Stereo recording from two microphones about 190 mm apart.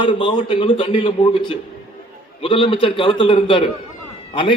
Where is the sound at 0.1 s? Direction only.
25° left (ahead or behind).